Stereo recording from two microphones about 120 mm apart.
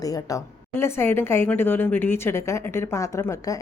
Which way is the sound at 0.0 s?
30° left (ahead or behind).